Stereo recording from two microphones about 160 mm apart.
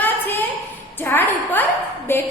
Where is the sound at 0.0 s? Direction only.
10° left (ahead or behind).